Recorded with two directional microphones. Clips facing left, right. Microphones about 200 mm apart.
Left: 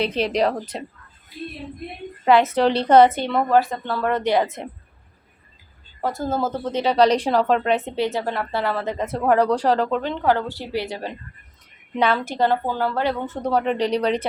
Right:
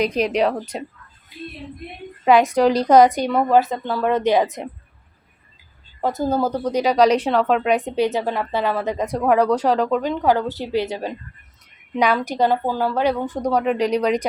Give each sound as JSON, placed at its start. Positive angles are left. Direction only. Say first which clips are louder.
{"t": 0.3, "sound": "a woman's voice", "louder": "right 1 dB", "side_deg": -10}
{"t": 2.2, "sound": "a woman's voice", "louder": "right 2 dB", "side_deg": -15}
{"t": 6.0, "sound": "a woman's voice", "louder": "right 3 dB", "side_deg": -20}
{"t": 7.7, "sound": "a woman's voice", "louder": "right 3 dB", "side_deg": -15}
{"t": 13.7, "sound": "speech", "louder": "right 2 dB", "side_deg": 35}